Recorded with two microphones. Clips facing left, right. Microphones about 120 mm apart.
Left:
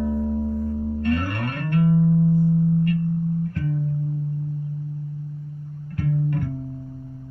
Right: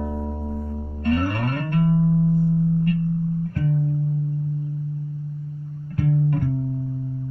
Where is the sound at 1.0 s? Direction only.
30° right (ahead or behind).